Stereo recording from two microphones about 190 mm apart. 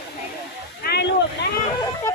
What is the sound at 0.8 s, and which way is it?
Speech, 60° left (ahead or behind).